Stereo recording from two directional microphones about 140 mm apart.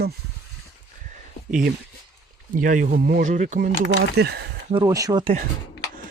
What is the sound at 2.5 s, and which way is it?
Speech, 75° right (ahead or behind).